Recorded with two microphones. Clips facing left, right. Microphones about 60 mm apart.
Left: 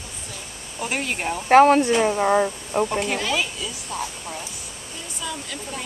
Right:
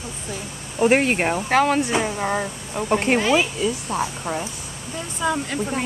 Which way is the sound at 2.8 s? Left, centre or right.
Right.